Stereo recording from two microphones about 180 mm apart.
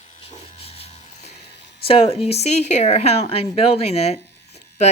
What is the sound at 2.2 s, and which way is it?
Speech, 35° left (ahead or behind).